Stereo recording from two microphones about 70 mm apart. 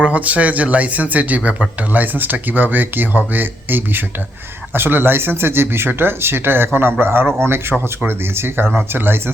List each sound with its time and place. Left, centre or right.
0.0 s speech: right